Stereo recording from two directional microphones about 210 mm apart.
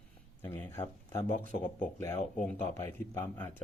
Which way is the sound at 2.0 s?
10° left (ahead or behind).